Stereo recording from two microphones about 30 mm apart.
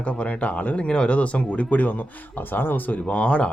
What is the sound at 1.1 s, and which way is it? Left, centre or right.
Speech, left.